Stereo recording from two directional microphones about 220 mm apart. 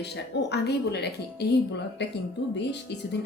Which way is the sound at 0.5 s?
50° left (ahead or behind).